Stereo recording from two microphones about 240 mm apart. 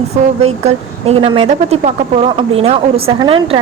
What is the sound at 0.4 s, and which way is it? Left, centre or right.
Speech, right.